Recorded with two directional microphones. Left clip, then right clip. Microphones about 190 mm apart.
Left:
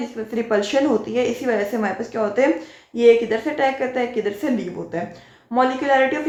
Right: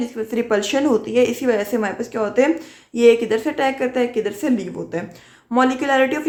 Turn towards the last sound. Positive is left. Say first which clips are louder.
# even
turn(degrees=-30)  # may be behind; listen again after turning